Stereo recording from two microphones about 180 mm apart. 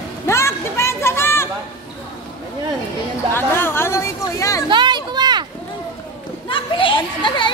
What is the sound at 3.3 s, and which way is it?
Speech, 10° left (ahead or behind).